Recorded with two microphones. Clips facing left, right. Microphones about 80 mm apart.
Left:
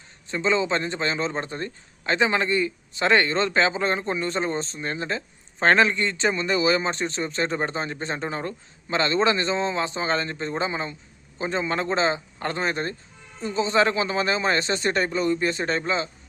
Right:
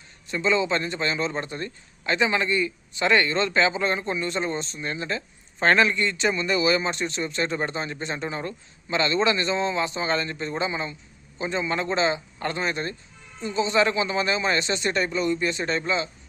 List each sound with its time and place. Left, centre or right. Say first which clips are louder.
0.3 s a man's voice: even; left